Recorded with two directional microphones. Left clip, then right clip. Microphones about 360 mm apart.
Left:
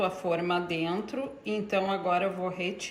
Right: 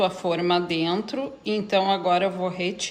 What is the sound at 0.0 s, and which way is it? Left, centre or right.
A woman's voice, centre.